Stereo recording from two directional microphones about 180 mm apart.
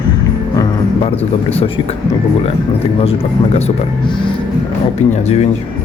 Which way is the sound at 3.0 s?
35° left (ahead or behind).